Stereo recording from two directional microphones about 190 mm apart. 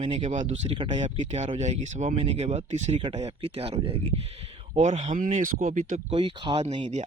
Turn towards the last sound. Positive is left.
turn(degrees=-30)  # may be behind; listen again after turning